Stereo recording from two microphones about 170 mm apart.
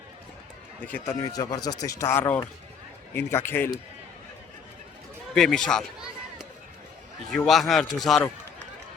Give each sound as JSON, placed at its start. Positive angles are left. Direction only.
{"t": 0.9, "sound": "a man's voice", "side_deg": 10}
{"t": 1.2, "sound": "a man's voice", "side_deg": 20}
{"t": 5.3, "sound": "speech", "side_deg": 5}